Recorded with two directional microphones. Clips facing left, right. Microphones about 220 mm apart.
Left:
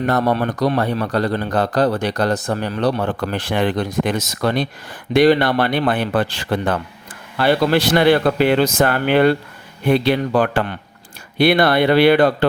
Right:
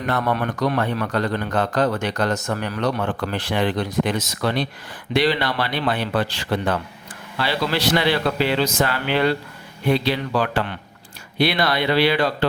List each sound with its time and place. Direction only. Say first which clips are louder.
0.0 s a man's voice: left 5 dB; 40° left (ahead or behind)